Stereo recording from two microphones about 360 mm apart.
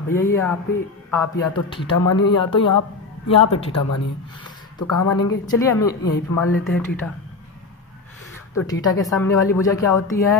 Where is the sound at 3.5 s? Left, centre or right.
Centre.